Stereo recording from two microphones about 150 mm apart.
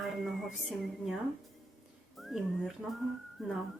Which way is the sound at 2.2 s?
Centre (ahead or behind).